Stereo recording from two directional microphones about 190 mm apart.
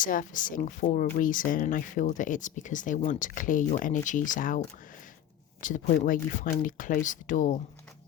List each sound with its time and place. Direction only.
0.0 s speech: 45° left (ahead or behind)
5.6 s speech: 45° left (ahead or behind)